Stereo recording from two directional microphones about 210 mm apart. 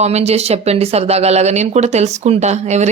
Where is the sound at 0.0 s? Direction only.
30° right (ahead or behind).